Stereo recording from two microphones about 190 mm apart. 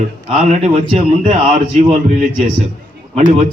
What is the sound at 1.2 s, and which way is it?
Speech, 35° right (ahead or behind).